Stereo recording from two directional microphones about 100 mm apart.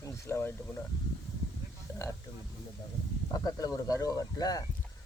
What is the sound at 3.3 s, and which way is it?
Speech, 35° left (ahead or behind).